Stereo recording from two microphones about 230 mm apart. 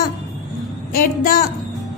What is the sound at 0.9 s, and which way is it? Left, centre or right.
Speech, left.